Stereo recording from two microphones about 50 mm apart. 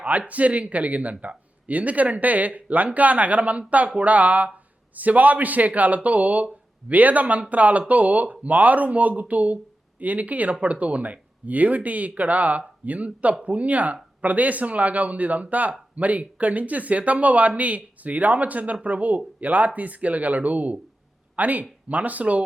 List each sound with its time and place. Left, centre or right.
0.0 s speech: right